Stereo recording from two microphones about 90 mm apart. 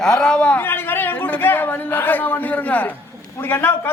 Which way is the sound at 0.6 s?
25° left (ahead or behind).